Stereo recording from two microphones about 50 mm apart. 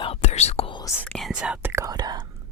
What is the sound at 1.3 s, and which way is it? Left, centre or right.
Whispering, centre.